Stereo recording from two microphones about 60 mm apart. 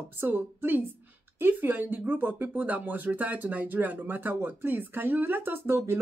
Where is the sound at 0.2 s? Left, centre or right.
Right.